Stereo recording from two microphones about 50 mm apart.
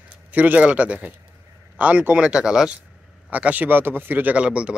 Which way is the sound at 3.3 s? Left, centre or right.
Right.